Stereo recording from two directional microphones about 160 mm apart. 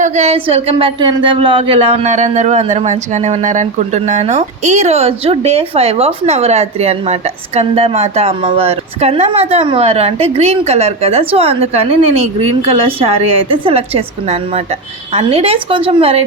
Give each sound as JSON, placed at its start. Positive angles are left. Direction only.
{"t": 0.0, "sound": "speech", "side_deg": -45}